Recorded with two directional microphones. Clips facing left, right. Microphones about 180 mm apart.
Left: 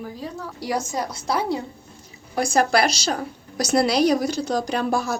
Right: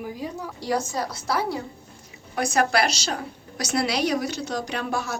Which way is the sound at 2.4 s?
35° left (ahead or behind).